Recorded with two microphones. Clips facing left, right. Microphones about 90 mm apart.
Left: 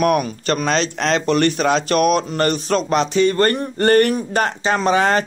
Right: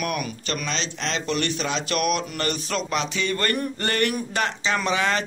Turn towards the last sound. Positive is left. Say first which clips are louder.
# left 7 dB
turn(degrees=40)  # may be behind; listen again after turning